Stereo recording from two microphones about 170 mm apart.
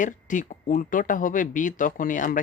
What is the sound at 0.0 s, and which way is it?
Speech, 50° left (ahead or behind).